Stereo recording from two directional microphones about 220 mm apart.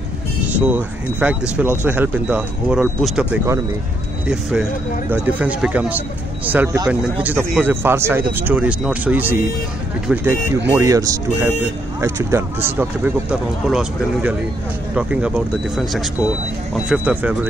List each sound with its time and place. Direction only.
0.6 s speech: 5° right (ahead or behind)